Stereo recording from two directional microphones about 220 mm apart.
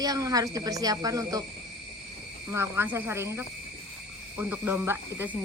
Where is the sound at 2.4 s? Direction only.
10° right (ahead or behind).